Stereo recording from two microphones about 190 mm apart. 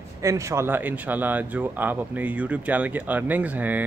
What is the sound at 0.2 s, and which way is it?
Speech, 15° right (ahead or behind).